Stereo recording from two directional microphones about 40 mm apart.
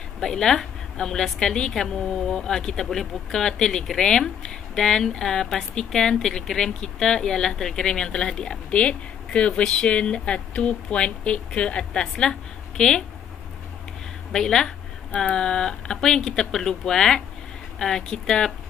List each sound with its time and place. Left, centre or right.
0.2 s speech: centre
14.3 s speech: centre